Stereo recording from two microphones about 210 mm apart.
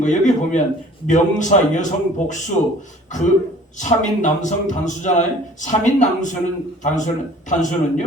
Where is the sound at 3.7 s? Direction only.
35° left (ahead or behind).